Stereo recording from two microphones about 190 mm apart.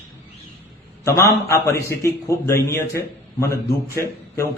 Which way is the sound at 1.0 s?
15° left (ahead or behind).